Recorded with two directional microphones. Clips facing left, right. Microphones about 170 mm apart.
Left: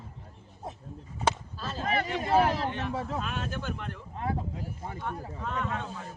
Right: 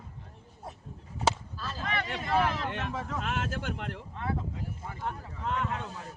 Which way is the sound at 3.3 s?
80° right.